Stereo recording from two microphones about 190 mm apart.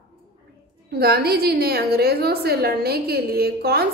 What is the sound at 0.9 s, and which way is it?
A woman's voice, 55° right (ahead or behind).